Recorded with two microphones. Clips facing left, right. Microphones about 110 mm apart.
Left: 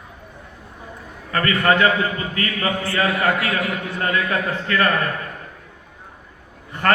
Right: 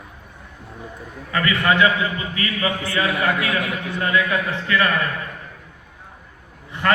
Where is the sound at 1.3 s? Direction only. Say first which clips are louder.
Left 1 dB; 40° left (ahead or behind).